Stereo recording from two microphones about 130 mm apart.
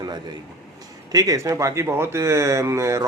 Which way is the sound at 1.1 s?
30° right (ahead or behind).